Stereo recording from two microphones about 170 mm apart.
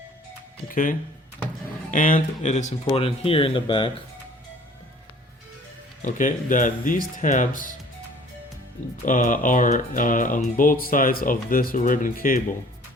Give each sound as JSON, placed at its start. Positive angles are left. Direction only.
{"t": 0.7, "sound": "speech", "side_deg": 55}
{"t": 6.0, "sound": "speech", "side_deg": 50}
{"t": 9.0, "sound": "speech", "side_deg": 50}